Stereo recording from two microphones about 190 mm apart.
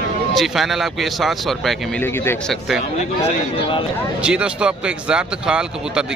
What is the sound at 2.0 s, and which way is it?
Speech, 10° left (ahead or behind).